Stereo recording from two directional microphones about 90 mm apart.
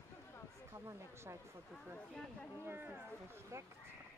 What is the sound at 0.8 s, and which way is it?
Speech, 30° right (ahead or behind).